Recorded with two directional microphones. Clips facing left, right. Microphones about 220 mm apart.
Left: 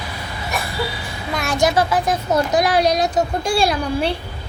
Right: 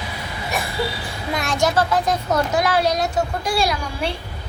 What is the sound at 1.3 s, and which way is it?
A child's voice, centre (ahead or behind).